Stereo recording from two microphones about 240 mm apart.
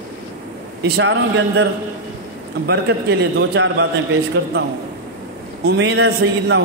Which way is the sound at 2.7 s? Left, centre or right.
Right.